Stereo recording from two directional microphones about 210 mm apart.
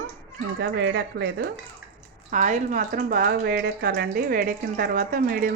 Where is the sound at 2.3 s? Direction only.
35° right (ahead or behind).